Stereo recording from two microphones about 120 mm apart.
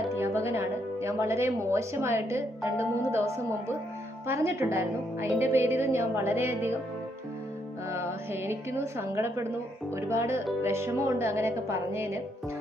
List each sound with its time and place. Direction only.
0.2 s speech: 20° right (ahead or behind)
7.9 s a woman's voice: 20° right (ahead or behind)